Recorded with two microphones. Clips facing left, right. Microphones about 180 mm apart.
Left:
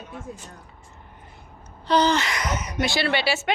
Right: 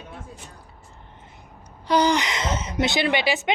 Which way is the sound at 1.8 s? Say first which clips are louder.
Even; 10° right (ahead or behind).